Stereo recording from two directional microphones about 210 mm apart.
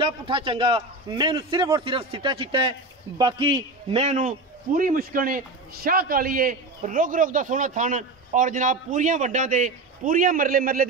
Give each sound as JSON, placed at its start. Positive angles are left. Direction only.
{"t": 0.0, "sound": "a man's voice", "side_deg": -25}